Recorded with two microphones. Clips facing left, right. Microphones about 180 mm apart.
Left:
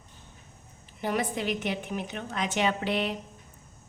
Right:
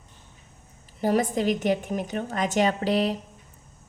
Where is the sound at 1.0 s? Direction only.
40° right (ahead or behind).